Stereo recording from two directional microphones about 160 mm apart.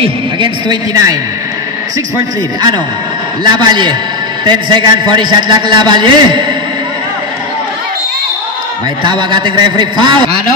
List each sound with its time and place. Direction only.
0.0 s a man's voice: 30° right (ahead or behind)
3.4 s a man's voice: 25° right (ahead or behind)
9.0 s a man's voice: 30° right (ahead or behind)